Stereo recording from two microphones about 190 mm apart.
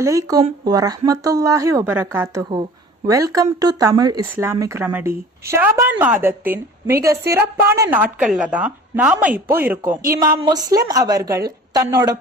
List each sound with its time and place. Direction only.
0.0 s a woman's voice: 20° right (ahead or behind)